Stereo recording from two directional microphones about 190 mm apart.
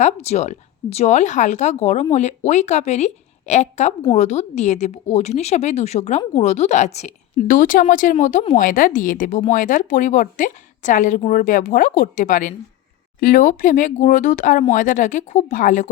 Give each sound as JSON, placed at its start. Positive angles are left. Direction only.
{"t": 0.0, "sound": "a woman's voice", "side_deg": 35}